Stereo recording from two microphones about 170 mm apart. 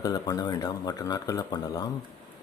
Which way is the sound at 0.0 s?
20° left (ahead or behind).